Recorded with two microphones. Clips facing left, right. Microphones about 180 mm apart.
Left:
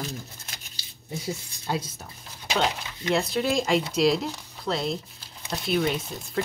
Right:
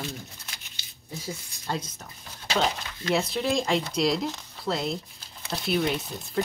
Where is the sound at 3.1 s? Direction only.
Centre (ahead or behind).